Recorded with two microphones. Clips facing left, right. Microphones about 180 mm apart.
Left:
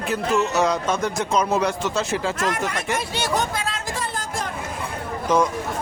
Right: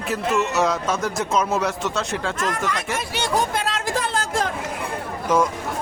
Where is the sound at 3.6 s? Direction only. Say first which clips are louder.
Right 4 dB; 75° right (ahead or behind).